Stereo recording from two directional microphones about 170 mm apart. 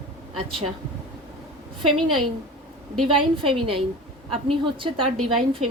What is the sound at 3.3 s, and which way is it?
A woman's voice, 30° right (ahead or behind).